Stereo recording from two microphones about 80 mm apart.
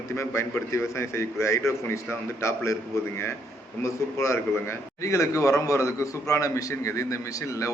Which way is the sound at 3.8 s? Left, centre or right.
Left.